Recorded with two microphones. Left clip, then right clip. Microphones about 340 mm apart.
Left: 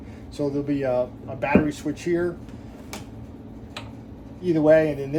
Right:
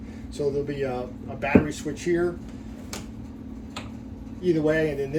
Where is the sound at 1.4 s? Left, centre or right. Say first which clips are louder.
Left 1 dB; centre.